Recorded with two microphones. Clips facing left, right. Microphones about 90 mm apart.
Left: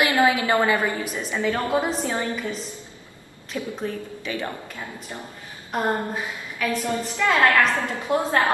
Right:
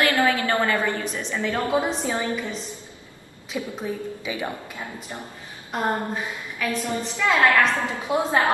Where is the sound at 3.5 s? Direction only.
10° right (ahead or behind).